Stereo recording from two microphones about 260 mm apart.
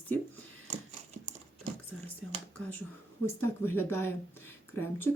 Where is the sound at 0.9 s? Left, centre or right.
Right.